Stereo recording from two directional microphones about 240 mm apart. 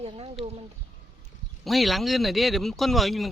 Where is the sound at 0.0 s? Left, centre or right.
Right.